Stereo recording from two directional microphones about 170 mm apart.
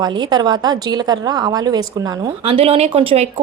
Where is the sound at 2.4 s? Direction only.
35° right (ahead or behind).